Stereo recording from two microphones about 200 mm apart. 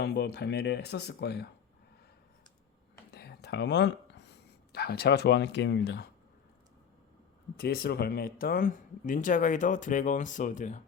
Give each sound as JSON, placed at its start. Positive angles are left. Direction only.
{"t": 0.0, "sound": "speech", "side_deg": 55}
{"t": 3.1, "sound": "speech", "side_deg": 55}
{"t": 7.6, "sound": "speech", "side_deg": 50}